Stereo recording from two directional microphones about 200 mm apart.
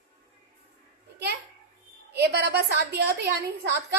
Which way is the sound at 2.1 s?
55° right (ahead or behind).